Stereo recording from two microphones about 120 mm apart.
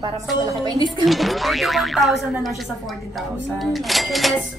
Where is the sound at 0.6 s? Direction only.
35° right (ahead or behind).